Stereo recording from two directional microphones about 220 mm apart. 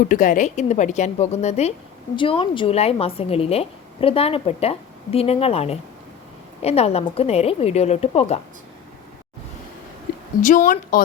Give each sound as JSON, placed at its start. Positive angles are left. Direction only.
{"t": 0.1, "sound": "a woman's voice", "side_deg": 35}
{"t": 10.4, "sound": "speech", "side_deg": 35}